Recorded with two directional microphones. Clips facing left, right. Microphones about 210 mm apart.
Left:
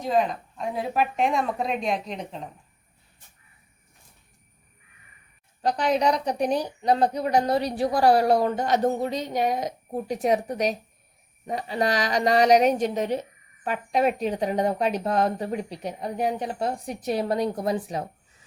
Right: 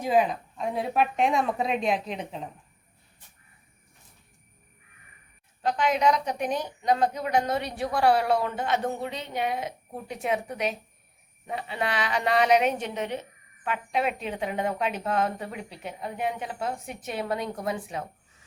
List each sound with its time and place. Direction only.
0.0 s speech: 5° right (ahead or behind)
5.6 s a woman's voice: 35° left (ahead or behind)